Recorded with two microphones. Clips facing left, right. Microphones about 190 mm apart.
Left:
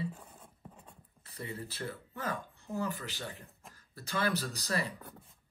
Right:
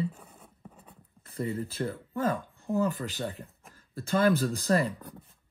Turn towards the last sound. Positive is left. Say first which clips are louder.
# right 9 dB
turn(degrees=-50)  # may be behind; listen again after turning